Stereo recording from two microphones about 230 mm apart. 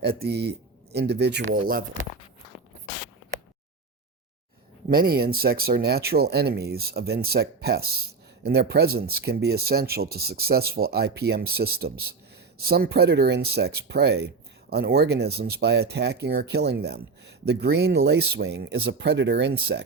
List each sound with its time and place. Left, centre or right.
0.0 s speech: right
4.9 s speech: right